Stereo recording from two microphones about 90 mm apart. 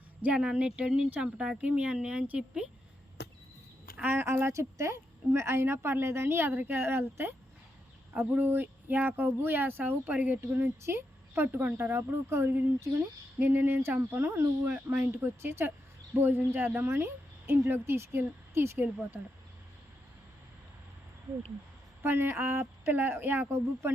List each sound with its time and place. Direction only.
0.2 s speech: 10° right (ahead or behind)
3.9 s a woman's voice: 20° right (ahead or behind)
22.0 s a woman's voice: 25° right (ahead or behind)